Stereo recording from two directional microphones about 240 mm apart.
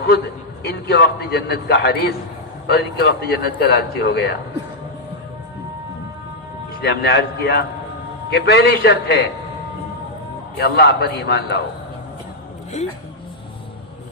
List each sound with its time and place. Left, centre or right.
0.6 s a man's voice: left
6.8 s a man's voice: left
10.6 s a man's voice: left